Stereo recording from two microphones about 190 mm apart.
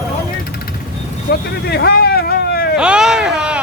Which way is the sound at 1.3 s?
55° left (ahead or behind).